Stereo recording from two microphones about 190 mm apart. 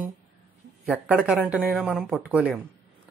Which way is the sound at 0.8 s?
5° right (ahead or behind).